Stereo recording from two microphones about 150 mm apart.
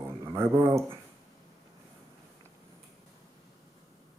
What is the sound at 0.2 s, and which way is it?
Speech, 20° right (ahead or behind).